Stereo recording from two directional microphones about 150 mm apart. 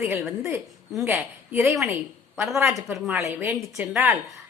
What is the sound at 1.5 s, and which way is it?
A woman's voice, 10° right (ahead or behind).